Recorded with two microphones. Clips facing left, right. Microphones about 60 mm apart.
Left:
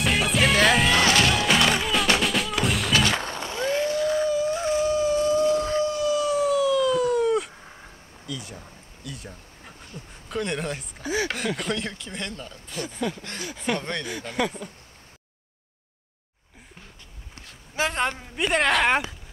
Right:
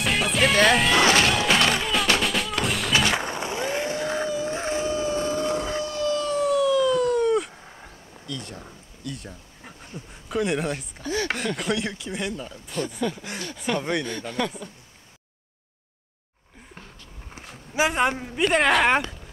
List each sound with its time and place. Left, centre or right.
0.0 s music: centre
1.0 s music: centre
1.3 s music: centre
2.9 s a sound: centre; by 5.8 s right
5.9 s siren: centre
8.5 s a sound: centre
11.0 s chopping: centre
11.3 s speech: centre
14.0 s speech: centre
17.4 s a sound: centre
18.4 s speech: centre